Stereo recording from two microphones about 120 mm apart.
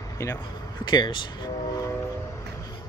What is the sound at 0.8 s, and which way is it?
Speech, 40° left (ahead or behind).